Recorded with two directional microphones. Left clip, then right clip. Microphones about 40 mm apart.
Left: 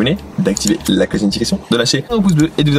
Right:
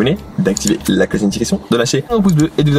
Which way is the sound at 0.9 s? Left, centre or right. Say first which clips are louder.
Even; left.